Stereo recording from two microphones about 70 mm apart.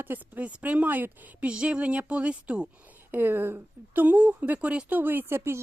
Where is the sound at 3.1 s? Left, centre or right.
Right.